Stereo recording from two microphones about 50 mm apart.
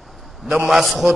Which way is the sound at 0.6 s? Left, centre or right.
Centre.